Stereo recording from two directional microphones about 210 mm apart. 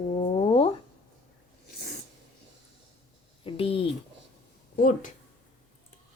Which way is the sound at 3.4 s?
25° left (ahead or behind).